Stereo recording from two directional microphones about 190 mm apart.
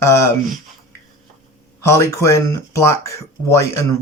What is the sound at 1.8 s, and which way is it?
Speech, 15° left (ahead or behind).